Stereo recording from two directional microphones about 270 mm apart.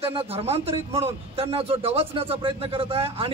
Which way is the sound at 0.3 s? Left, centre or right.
Right.